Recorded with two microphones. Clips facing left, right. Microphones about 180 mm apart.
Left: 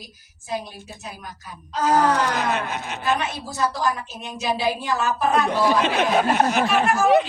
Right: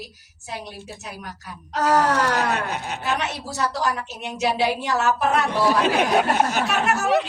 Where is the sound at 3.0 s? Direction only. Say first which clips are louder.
Left 4 dB; 75° right (ahead or behind).